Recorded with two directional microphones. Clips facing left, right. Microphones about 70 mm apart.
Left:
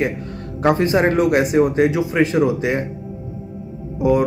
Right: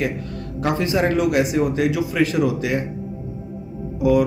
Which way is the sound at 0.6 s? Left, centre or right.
Left.